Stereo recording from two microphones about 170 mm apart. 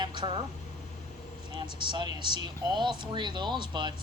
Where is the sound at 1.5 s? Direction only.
25° right (ahead or behind).